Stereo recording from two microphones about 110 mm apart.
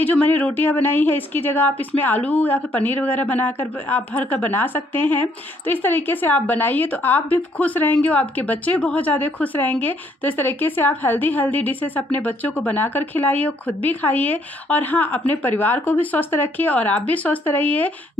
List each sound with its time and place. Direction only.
0.0 s a woman's voice: 15° left (ahead or behind)